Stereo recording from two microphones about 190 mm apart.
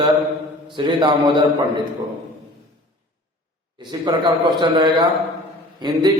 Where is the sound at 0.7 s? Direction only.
25° right (ahead or behind).